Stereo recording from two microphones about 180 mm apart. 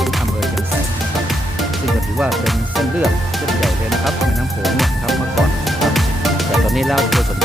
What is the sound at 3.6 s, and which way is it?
Music, centre (ahead or behind).